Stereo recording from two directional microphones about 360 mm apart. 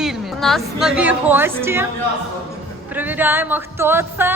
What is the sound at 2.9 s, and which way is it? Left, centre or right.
Speech, centre.